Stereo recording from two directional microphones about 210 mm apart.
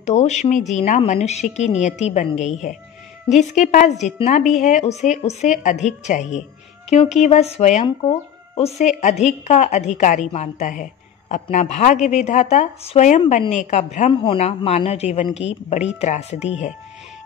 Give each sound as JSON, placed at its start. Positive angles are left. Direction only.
{"t": 0.0, "sound": "a woman's voice", "side_deg": 35}
{"t": 14.1, "sound": "a woman's voice", "side_deg": 25}